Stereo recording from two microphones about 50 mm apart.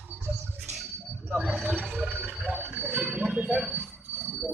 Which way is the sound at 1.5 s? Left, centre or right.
Right.